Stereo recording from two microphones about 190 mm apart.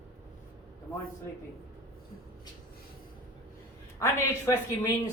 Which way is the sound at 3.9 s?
15° left (ahead or behind).